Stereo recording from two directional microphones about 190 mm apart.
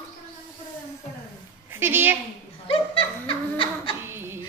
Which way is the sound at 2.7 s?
30° left (ahead or behind).